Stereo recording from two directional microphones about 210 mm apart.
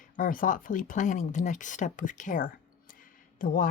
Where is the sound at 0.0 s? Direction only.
40° left (ahead or behind).